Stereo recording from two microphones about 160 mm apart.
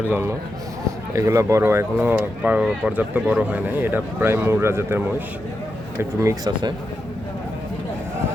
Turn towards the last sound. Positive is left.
turn(degrees=-25)  # may be behind; listen again after turning